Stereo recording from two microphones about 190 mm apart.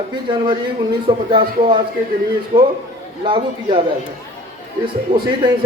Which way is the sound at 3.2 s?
25° right (ahead or behind).